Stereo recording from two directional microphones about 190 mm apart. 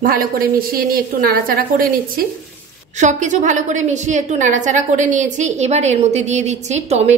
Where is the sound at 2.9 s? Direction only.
40° right (ahead or behind).